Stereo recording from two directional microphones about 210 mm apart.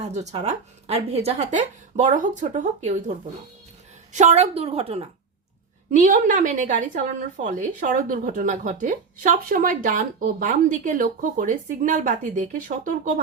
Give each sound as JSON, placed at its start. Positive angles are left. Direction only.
{"t": 0.0, "sound": "a woman's voice", "side_deg": -35}
{"t": 4.1, "sound": "a woman's voice", "side_deg": -35}
{"t": 5.9, "sound": "a woman's voice", "side_deg": -40}